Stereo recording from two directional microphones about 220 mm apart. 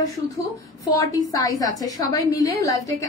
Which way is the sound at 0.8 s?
15° left (ahead or behind).